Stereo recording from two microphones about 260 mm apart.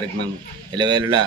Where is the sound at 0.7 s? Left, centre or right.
Centre.